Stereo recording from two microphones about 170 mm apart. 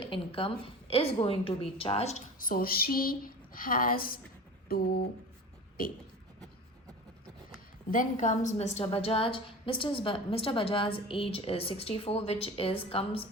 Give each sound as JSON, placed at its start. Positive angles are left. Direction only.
{"t": 0.0, "sound": "a woman's voice", "side_deg": 30}
{"t": 4.7, "sound": "a sound", "side_deg": 60}
{"t": 7.9, "sound": "a woman's voice", "side_deg": 50}